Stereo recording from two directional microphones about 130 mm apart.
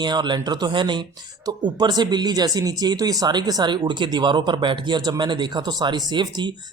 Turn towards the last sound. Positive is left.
turn(degrees=-35)  # may be behind; listen again after turning